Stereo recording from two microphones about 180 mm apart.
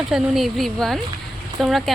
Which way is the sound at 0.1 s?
Centre (ahead or behind).